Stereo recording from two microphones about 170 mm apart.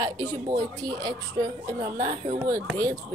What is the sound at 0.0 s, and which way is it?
A woman's voice, 25° right (ahead or behind).